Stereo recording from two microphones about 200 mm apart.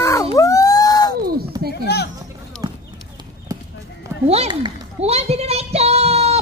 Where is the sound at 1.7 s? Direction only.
55° left (ahead or behind).